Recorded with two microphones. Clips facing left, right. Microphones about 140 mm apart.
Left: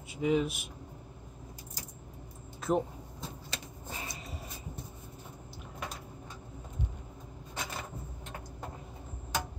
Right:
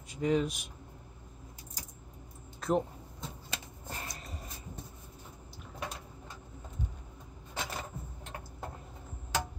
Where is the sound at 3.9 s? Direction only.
Centre (ahead or behind).